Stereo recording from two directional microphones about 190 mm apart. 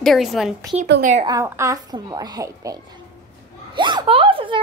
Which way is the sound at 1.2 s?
15° right (ahead or behind).